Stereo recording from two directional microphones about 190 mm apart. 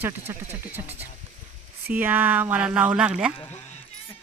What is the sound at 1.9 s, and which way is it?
Speech, 10° right (ahead or behind).